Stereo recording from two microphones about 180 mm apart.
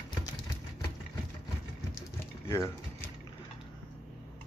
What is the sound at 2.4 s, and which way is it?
Speech, 15° left (ahead or behind).